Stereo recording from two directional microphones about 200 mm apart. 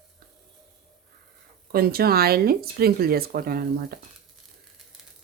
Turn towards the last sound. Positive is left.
turn(degrees=-50)  # may be behind; listen again after turning